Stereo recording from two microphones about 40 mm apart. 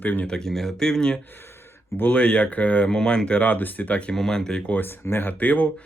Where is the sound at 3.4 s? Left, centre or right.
Left.